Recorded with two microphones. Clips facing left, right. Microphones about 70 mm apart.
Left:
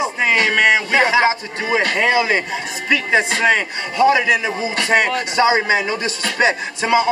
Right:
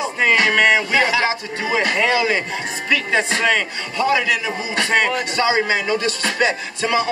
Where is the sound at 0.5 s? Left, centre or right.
Centre.